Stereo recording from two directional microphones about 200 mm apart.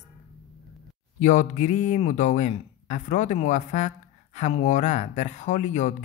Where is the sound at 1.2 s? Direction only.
40° left (ahead or behind).